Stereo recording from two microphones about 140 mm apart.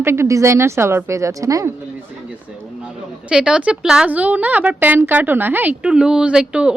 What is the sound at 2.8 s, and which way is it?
A woman's voice, 5° right (ahead or behind).